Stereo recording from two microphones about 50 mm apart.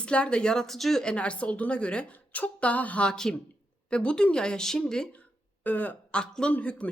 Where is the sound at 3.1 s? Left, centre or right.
Centre.